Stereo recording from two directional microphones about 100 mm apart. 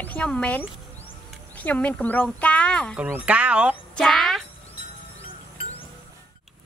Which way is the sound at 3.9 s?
5° left (ahead or behind).